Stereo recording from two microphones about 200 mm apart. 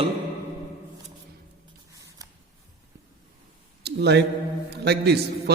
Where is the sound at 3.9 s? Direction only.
55° right (ahead or behind).